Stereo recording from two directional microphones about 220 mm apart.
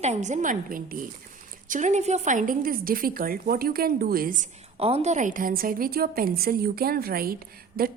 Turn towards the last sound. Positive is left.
turn(degrees=-40)  # may be behind; listen again after turning